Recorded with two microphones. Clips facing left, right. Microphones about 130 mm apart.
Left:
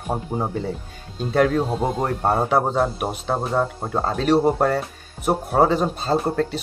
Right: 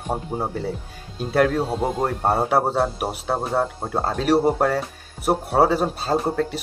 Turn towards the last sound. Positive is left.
turn(degrees=-5)  # may be behind; listen again after turning